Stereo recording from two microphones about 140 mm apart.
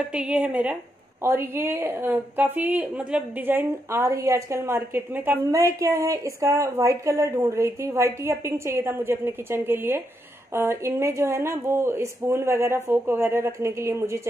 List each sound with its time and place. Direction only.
0.1 s a woman's voice: 5° right (ahead or behind)